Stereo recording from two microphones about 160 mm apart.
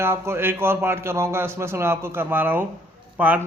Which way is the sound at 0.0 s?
15° right (ahead or behind).